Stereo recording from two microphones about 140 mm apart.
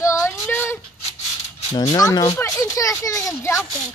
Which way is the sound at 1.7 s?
25° left (ahead or behind).